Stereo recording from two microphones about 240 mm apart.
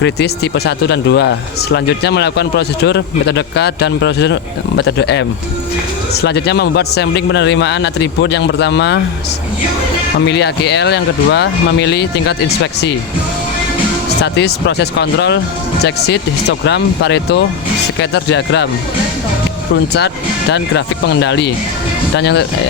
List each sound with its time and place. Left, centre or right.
0.0 s a man's voice: left
6.2 s a man's voice: left
10.2 s a man's voice: left
14.2 s a man's voice: left
20.5 s a man's voice: left